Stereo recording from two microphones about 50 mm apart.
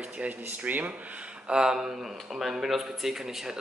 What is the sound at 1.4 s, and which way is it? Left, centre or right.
A man's voice, centre.